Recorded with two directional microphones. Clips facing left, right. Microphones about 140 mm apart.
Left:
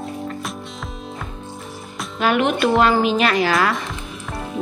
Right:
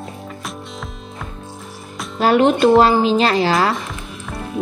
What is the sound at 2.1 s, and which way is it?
A woman's voice, 35° right (ahead or behind).